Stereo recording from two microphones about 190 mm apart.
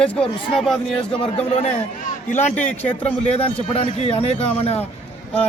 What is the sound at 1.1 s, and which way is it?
Speech, 30° left (ahead or behind).